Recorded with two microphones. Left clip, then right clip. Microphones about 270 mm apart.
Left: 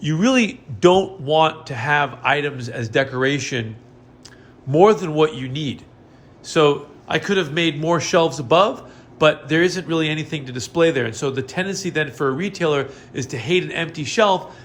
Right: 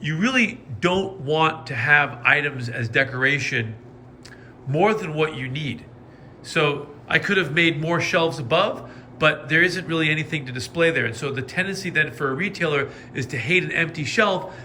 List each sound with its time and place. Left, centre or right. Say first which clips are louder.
0.0 s a man's voice: left 3 dB; centre
4.7 s a man's voice: left 6 dB; centre